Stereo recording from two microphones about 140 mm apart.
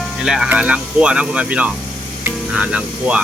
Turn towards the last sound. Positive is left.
turn(degrees=-10)  # may be behind; listen again after turning